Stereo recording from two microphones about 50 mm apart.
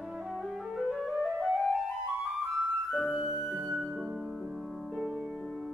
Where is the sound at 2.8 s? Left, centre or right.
Centre.